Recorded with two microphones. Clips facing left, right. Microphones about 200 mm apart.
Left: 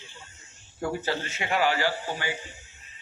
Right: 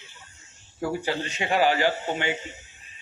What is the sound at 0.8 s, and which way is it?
A man's voice, 15° right (ahead or behind).